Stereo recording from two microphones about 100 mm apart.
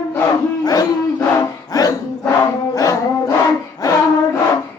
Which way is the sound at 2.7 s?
35° left (ahead or behind).